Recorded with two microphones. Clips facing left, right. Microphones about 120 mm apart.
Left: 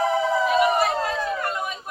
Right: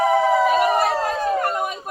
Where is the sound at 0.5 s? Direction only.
40° right (ahead or behind).